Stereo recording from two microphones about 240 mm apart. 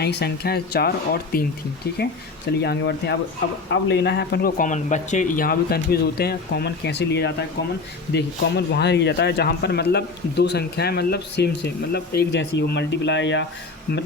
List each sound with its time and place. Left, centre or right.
0.0 s speech: left